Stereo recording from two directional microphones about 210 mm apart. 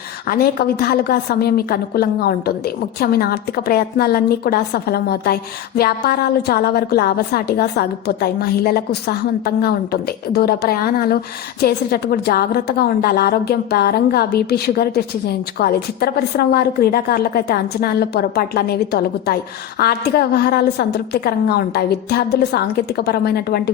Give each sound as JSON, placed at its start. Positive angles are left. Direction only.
{"t": 0.3, "sound": "a woman's voice", "side_deg": 45}